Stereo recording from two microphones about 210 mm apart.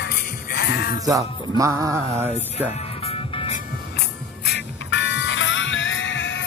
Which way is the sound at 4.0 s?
55° left (ahead or behind).